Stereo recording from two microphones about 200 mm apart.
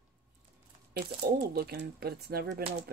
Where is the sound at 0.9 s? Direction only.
50° right (ahead or behind).